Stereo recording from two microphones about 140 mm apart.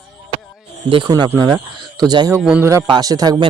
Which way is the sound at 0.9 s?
30° right (ahead or behind).